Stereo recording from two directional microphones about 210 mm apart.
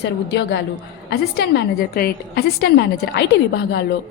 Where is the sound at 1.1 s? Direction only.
50° left (ahead or behind).